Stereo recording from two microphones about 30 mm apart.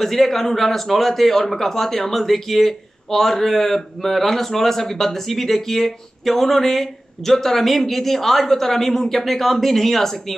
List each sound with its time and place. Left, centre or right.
0.0 s speech: centre